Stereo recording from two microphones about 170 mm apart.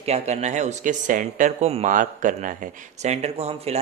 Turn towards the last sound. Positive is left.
turn(degrees=-35)  # may be behind; listen again after turning